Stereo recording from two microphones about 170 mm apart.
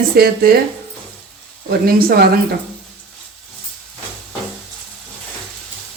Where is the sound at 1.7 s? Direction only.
65° right (ahead or behind).